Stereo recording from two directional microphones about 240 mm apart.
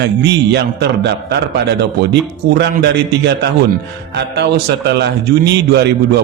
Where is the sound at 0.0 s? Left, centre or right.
Right.